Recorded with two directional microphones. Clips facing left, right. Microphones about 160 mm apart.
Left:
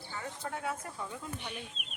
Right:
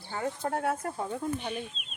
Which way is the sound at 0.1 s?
50° right (ahead or behind).